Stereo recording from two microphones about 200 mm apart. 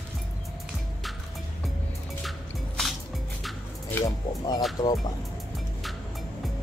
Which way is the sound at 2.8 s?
5° left (ahead or behind).